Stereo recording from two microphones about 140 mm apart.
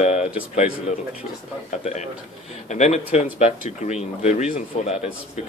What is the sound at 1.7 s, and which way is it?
Speech, 55° left (ahead or behind).